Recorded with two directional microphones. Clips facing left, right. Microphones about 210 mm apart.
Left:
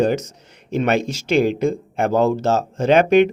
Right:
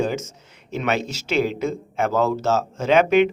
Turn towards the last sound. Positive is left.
turn(degrees=35)  # may be behind; listen again after turning